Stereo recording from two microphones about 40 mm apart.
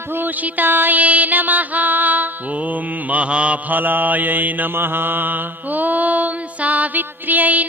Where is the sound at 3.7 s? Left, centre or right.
Right.